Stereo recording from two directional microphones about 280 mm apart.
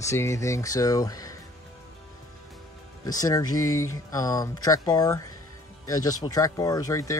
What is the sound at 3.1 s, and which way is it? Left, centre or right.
Speech, centre.